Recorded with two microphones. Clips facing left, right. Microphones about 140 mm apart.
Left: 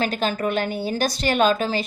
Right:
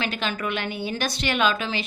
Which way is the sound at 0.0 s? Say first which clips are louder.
Left 5 dB; 40° left (ahead or behind).